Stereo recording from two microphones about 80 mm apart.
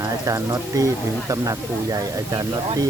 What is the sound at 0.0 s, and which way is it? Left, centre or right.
Speech, right.